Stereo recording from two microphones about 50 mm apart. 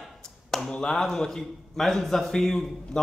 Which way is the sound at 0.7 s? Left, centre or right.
Centre.